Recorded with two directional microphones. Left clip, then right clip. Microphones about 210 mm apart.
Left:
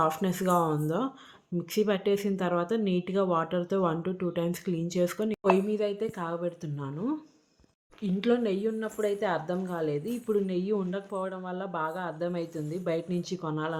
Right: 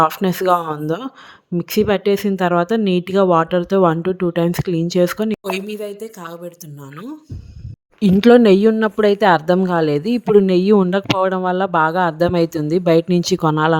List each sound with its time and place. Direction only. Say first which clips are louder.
0.0 s speech: right 12 dB; 40° right (ahead or behind)
5.3 s a woman's voice: right 2 dB; centre (ahead or behind)
8.0 s speech: right 17 dB; 55° right (ahead or behind)